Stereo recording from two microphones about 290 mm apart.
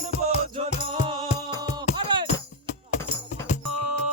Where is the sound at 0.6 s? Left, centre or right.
Centre.